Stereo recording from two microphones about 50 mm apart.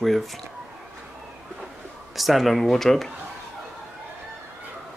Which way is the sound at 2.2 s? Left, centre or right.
Centre.